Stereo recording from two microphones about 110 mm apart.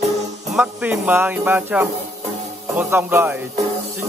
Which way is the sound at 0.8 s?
20° right (ahead or behind).